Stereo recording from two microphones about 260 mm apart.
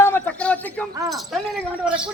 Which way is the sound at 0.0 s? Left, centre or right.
Centre.